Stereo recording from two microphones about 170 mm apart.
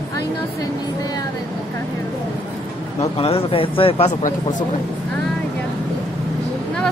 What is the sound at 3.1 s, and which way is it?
Speech, 35° left (ahead or behind).